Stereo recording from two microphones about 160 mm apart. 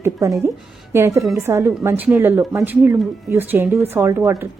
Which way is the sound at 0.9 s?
15° right (ahead or behind).